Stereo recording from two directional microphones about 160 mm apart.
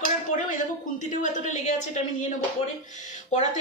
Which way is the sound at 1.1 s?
50° left (ahead or behind).